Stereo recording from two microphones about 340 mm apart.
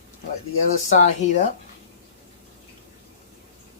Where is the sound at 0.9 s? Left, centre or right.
Left.